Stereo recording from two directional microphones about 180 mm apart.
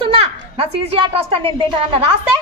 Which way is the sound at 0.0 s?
30° right (ahead or behind).